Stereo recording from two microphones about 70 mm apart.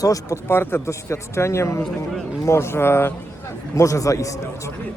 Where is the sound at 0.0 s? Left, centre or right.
Left.